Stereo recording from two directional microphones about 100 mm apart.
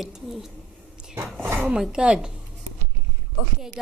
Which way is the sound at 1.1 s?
25° right (ahead or behind).